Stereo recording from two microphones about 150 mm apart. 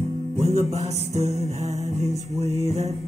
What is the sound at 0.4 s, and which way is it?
Music, 45° right (ahead or behind).